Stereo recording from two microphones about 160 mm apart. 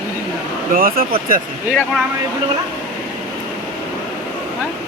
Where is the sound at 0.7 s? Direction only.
65° right (ahead or behind).